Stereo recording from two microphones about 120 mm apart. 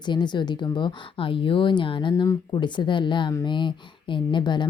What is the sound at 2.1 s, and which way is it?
Speech, 30° left (ahead or behind).